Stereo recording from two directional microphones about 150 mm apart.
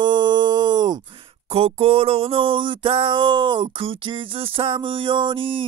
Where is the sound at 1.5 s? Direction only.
40° right (ahead or behind).